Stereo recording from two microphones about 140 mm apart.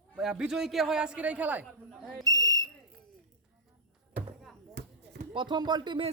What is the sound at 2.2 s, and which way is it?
Whistle, 25° right (ahead or behind).